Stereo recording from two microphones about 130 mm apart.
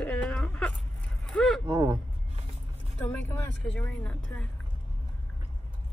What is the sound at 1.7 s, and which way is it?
Vehicle, 40° right (ahead or behind).